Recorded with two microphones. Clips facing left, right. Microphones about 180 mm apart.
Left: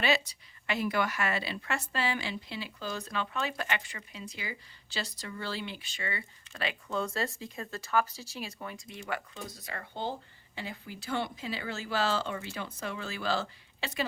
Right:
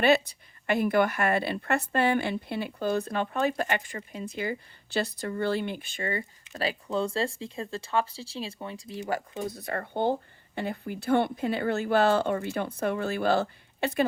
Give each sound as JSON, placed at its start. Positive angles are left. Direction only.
{"t": 0.0, "sound": "speech", "side_deg": -55}